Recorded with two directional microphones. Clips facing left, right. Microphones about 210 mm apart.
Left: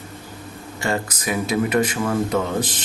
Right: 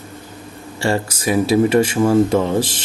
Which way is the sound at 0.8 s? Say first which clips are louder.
Right 5 dB; 30° right (ahead or behind).